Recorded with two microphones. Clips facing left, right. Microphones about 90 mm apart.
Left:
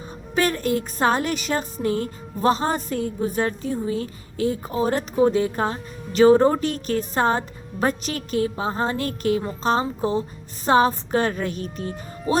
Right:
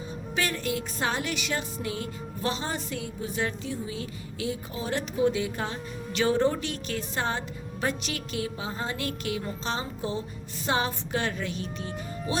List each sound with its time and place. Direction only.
0.3 s music: 45° left (ahead or behind)